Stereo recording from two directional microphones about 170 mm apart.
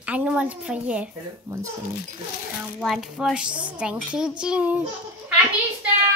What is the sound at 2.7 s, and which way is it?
Speech, 5° right (ahead or behind).